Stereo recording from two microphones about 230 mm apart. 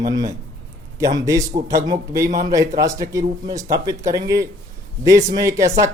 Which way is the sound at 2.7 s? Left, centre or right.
Centre.